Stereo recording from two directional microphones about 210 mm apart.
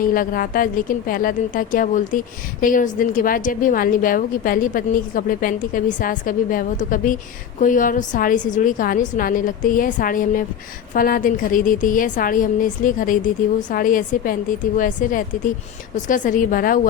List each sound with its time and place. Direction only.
0.0 s speech: 40° left (ahead or behind)